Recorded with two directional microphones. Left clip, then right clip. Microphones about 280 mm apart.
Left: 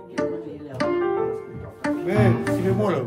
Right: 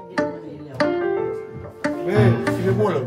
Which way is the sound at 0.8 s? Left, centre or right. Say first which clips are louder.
Right 2 dB; right.